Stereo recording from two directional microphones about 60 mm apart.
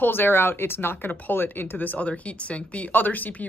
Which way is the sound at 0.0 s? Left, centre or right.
Left.